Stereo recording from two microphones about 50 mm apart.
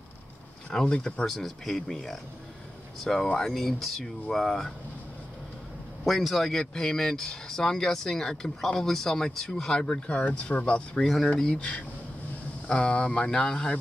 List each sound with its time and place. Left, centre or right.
0.7 s speech: centre
1.2 s speech: centre
6.0 s speech: centre
6.6 s speech: centre
10.1 s speech: left
11.0 s speech: centre
12.6 s speech: centre